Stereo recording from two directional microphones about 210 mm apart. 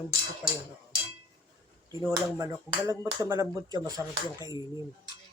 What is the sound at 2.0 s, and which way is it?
Speech, 15° right (ahead or behind).